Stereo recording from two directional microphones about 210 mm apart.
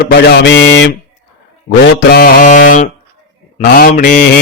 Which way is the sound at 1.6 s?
50° left (ahead or behind).